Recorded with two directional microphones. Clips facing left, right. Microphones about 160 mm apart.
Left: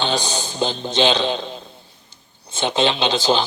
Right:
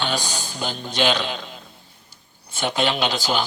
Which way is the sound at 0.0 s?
25° left (ahead or behind).